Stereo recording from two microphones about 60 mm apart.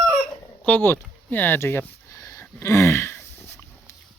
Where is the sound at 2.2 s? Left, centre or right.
Left.